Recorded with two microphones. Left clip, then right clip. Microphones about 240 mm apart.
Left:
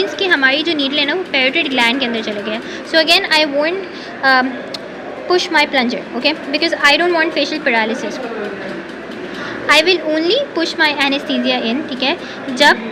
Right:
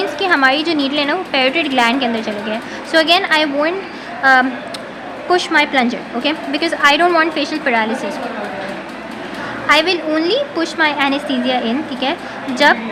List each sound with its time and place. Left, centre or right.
0.0 s a woman's voice: centre
9.6 s a woman's voice: centre